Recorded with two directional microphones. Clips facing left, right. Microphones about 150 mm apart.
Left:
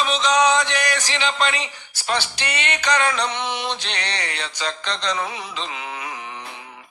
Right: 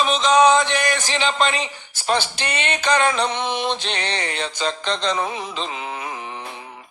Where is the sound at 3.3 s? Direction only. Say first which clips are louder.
Right 3 dB; 50° right (ahead or behind).